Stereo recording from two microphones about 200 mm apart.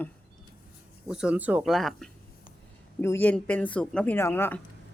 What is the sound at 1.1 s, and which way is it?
A woman's voice, 5° right (ahead or behind).